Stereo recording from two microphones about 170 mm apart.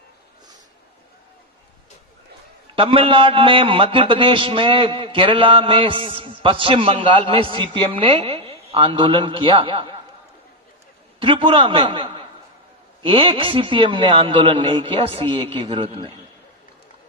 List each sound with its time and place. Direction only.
2.7 s a man's voice: 30° right (ahead or behind)
11.2 s a man's voice: 30° right (ahead or behind)